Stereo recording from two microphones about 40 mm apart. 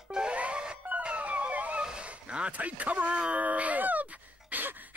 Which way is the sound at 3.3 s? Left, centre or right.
Right.